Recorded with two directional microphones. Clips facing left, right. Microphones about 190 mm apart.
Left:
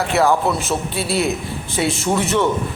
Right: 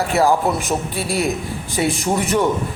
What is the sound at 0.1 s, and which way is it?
Speech, 35° right (ahead or behind).